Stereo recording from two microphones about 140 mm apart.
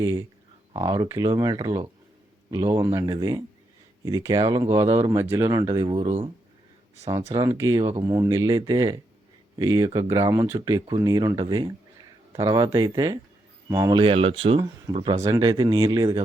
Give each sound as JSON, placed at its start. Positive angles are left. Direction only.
{"t": 0.0, "sound": "speech", "side_deg": -20}
{"t": 5.9, "sound": "speech", "side_deg": -45}
{"t": 7.3, "sound": "speech", "side_deg": -25}
{"t": 10.7, "sound": "speech", "side_deg": -30}
{"t": 13.9, "sound": "speech", "side_deg": -40}
{"t": 15.2, "sound": "speech", "side_deg": -25}